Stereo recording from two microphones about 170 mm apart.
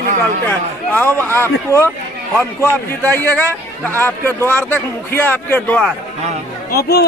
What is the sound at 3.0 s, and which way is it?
Speech, 10° left (ahead or behind).